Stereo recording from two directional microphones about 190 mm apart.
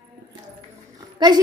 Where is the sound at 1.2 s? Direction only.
20° right (ahead or behind).